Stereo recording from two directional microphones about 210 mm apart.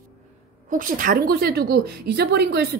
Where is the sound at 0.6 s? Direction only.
40° right (ahead or behind).